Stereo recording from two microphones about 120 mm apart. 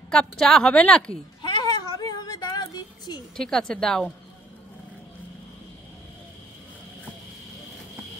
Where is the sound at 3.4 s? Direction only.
5° left (ahead or behind).